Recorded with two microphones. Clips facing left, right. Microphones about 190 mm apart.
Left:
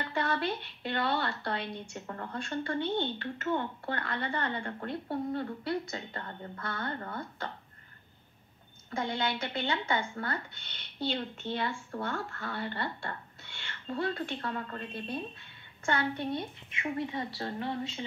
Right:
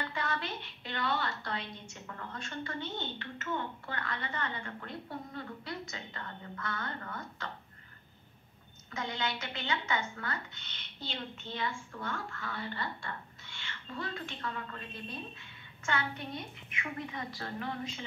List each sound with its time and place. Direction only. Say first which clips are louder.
0.1 s a woman's voice: left 6 dB; 35° left (ahead or behind)
8.9 s a woman's voice: left 4 dB; 30° left (ahead or behind)